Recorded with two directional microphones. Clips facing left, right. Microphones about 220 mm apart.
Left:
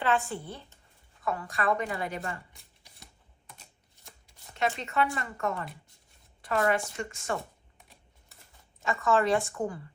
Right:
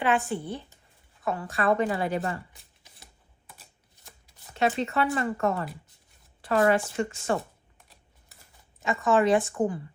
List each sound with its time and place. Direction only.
0.0 s speech: 15° right (ahead or behind)
1.2 s a woman's voice: 25° right (ahead or behind)
3.5 s shuffling cards: 5° right (ahead or behind)
4.8 s a woman's voice: 30° right (ahead or behind)
7.8 s typewriter: centre (ahead or behind)
8.8 s speech: 20° right (ahead or behind)